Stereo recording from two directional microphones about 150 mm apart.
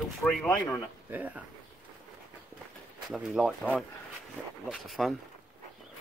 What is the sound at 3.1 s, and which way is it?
Speech, centre (ahead or behind).